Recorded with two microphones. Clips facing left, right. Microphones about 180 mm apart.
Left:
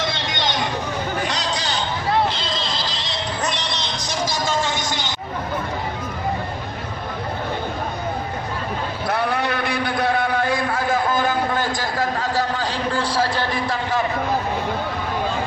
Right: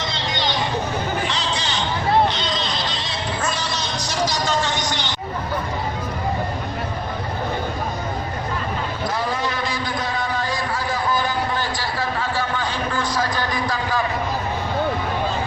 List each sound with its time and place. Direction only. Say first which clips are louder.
1.3 s a sound: even; 40° left (ahead or behind)
4.9 s hubbub: even; 45° left (ahead or behind)
9.0 s vehicle: left 3 dB; 60° left (ahead or behind); by 14.0 s 25° left (ahead or behind)